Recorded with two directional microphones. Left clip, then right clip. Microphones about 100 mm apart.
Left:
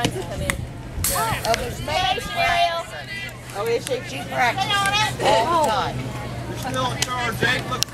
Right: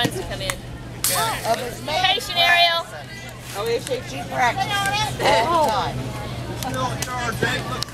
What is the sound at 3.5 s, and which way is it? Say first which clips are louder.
Speech: even; 5° right (ahead or behind).